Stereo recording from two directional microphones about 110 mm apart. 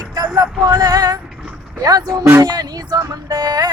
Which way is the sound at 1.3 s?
5° right (ahead or behind).